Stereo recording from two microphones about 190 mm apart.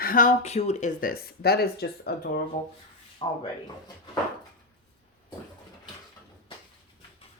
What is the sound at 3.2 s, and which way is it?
Speech, 25° left (ahead or behind).